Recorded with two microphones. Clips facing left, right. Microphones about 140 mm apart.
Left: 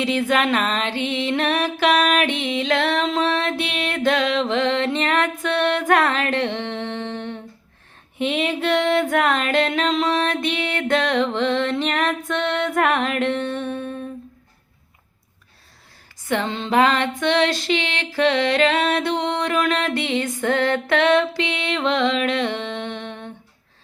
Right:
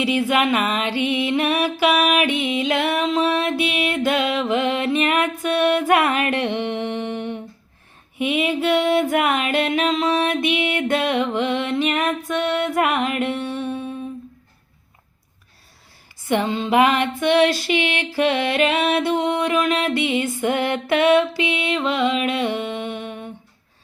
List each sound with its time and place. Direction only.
0.0 s music: 10° right (ahead or behind)
2.3 s music: 50° right (ahead or behind)
2.6 s music: 10° right (ahead or behind)
16.3 s music: 10° right (ahead or behind)